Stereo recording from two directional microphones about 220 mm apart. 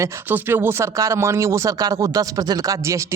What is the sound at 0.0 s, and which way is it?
Speech, 10° right (ahead or behind).